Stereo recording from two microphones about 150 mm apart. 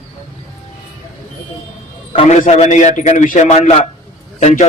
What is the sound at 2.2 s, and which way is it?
A man's voice, 50° left (ahead or behind).